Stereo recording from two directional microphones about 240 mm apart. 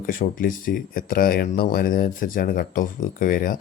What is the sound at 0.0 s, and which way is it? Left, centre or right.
Speech, left.